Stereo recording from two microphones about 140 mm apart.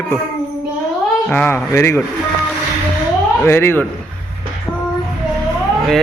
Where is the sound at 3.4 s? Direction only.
15° left (ahead or behind).